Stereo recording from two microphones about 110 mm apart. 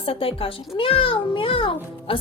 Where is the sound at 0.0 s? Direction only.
55° left (ahead or behind).